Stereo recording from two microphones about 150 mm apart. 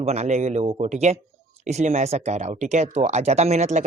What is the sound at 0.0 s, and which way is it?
Speech, 45° right (ahead or behind).